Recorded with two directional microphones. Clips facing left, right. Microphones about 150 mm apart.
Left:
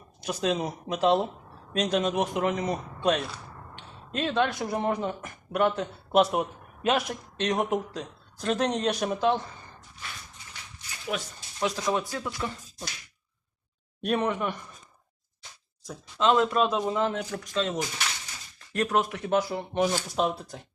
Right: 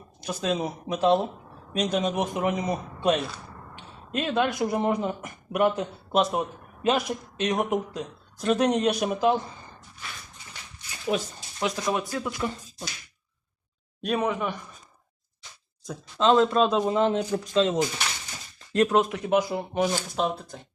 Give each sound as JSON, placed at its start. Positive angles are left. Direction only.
{"t": 0.2, "sound": "speech", "side_deg": 0}
{"t": 6.1, "sound": "speech", "side_deg": 5}
{"t": 11.1, "sound": "speech", "side_deg": -30}
{"t": 11.8, "sound": "speech", "side_deg": -10}
{"t": 14.0, "sound": "speech", "side_deg": 0}
{"t": 15.8, "sound": "speech", "side_deg": -25}
{"t": 18.9, "sound": "speech", "side_deg": -15}
{"t": 19.7, "sound": "speech", "side_deg": 0}